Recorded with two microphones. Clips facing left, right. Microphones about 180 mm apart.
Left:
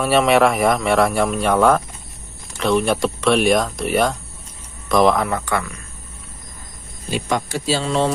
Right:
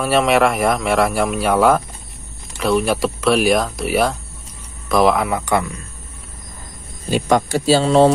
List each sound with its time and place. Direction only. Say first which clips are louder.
0.0 s speech: even; centre (ahead or behind); by 5.7 s 15° right (ahead or behind)
7.1 s speech: right 6 dB; 45° right (ahead or behind)